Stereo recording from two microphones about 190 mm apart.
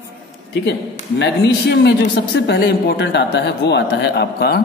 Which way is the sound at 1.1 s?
65° left (ahead or behind).